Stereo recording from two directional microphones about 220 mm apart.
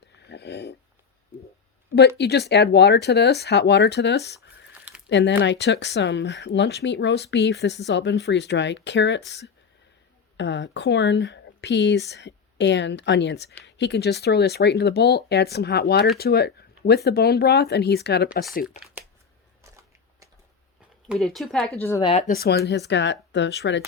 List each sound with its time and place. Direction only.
0.3 s a sound: 50° left (ahead or behind)
2.0 s speech: 50° left (ahead or behind)
10.3 s speech: 55° left (ahead or behind)
21.1 s speech: centre (ahead or behind)
21.8 s speech: 15° left (ahead or behind)
22.1 s speech: 40° left (ahead or behind)